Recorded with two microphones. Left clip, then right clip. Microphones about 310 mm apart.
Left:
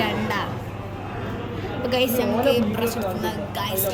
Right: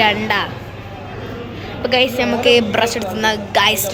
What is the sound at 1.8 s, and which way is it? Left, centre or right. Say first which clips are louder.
A woman's voice: right 7 dB; centre.